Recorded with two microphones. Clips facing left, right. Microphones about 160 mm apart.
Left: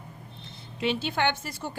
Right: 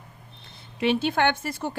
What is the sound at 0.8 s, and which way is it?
Speech, 55° right (ahead or behind).